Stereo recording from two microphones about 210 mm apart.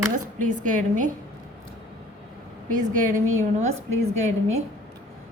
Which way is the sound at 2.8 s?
35° right (ahead or behind).